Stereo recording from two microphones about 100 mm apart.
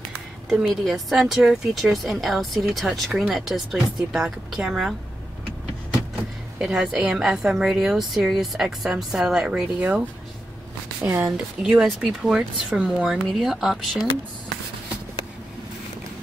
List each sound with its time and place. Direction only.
0.5 s speech: 5° right (ahead or behind)
6.6 s a woman's voice: 5° right (ahead or behind)
11.0 s a woman's voice: 25° right (ahead or behind)
11.3 s speech: 10° right (ahead or behind)